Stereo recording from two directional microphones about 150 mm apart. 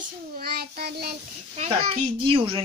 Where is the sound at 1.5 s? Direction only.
45° right (ahead or behind).